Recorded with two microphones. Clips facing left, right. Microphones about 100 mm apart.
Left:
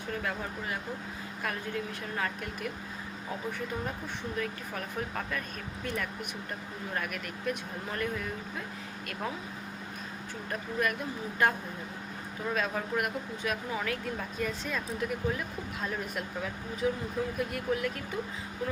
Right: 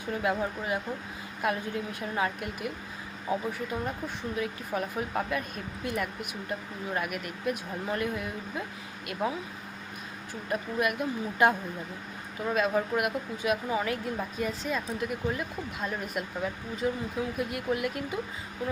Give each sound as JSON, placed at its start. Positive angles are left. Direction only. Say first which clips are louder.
{"t": 0.1, "sound": "speech", "louder": "right 6 dB", "side_deg": -15}
{"t": 4.4, "sound": "speech", "louder": "right 6 dB", "side_deg": -15}
{"t": 10.5, "sound": "speech", "louder": "right 3 dB", "side_deg": -15}